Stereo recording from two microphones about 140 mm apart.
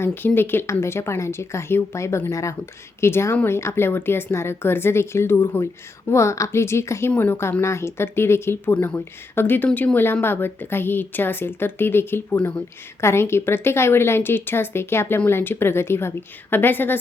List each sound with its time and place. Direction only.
0.0 s speech: 15° left (ahead or behind)